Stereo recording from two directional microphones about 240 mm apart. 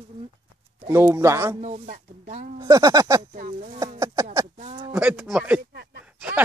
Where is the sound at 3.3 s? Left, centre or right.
Right.